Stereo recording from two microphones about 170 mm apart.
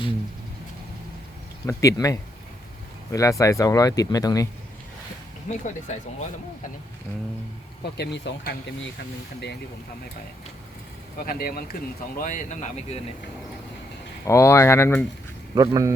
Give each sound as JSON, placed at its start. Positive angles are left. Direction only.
{"t": 1.6, "sound": "speech", "side_deg": 20}
{"t": 7.9, "sound": "speech", "side_deg": 80}
{"t": 11.2, "sound": "speech", "side_deg": 60}
{"t": 12.1, "sound": "speech", "side_deg": 50}
{"t": 14.3, "sound": "speech", "side_deg": 15}
{"t": 15.5, "sound": "speech", "side_deg": -20}